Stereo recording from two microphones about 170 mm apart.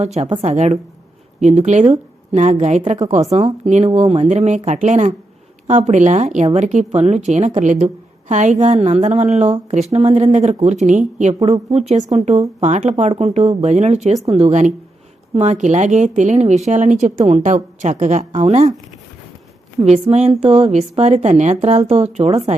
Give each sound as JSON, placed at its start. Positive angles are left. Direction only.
{"t": 0.0, "sound": "speech", "side_deg": -40}
{"t": 19.8, "sound": "speech", "side_deg": -40}